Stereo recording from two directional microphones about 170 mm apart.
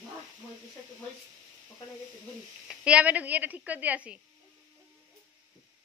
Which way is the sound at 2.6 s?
5° right (ahead or behind).